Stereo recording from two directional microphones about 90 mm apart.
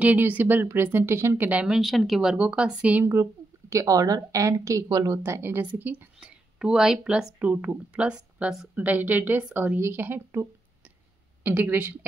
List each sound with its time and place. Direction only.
0.0 s speech: 20° right (ahead or behind)
1.5 s speech: 15° right (ahead or behind)
1.8 s speech: centre (ahead or behind)
2.3 s speech: 15° right (ahead or behind)
3.7 s a woman's voice: 40° right (ahead or behind); by 6.0 s 20° right (ahead or behind)
6.1 s a sound: 10° right (ahead or behind)
7.0 s speech: 10° right (ahead or behind)
8.7 s speech: 20° right (ahead or behind)
9.8 s speech: 25° right (ahead or behind)